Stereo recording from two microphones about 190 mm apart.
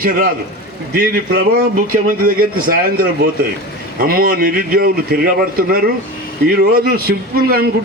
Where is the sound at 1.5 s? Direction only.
50° right (ahead or behind).